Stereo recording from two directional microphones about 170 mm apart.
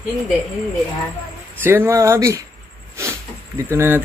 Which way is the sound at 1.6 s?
15° right (ahead or behind).